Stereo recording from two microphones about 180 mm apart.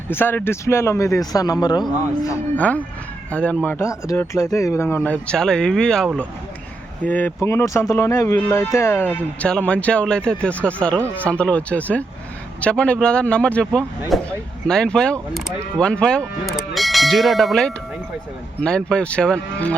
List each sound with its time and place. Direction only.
0.1 s speech: 10° left (ahead or behind)